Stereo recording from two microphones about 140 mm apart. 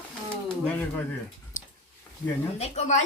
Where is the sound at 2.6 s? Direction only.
50° left (ahead or behind).